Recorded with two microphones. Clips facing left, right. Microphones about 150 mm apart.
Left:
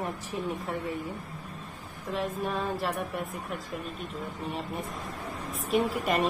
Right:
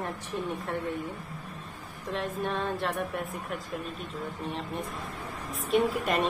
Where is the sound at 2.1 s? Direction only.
Centre (ahead or behind).